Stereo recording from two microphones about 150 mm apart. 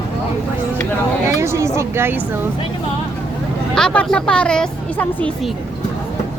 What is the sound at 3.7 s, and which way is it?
Speech, 5° left (ahead or behind).